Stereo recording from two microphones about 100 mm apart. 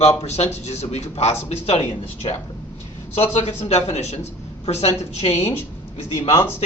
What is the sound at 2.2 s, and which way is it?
Speech, 60° left (ahead or behind).